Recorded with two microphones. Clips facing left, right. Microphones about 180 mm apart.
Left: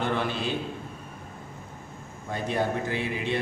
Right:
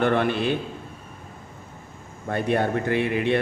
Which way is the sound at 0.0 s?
60° right (ahead or behind).